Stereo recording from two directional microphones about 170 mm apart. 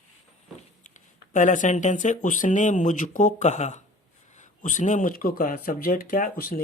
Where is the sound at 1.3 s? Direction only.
50° left (ahead or behind).